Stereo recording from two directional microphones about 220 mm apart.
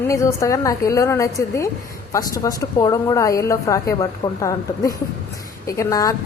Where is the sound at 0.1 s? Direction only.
15° left (ahead or behind).